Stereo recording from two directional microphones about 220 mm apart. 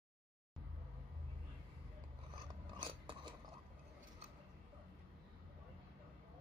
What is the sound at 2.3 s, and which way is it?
Filing, 20° right (ahead or behind).